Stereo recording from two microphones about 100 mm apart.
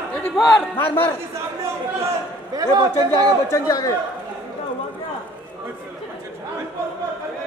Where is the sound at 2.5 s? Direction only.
40° right (ahead or behind).